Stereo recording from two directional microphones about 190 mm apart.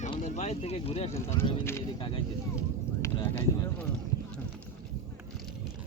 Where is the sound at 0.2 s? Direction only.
35° left (ahead or behind).